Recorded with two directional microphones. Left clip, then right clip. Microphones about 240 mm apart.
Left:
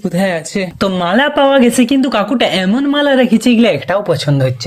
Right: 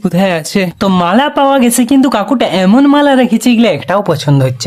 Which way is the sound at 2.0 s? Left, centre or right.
Centre.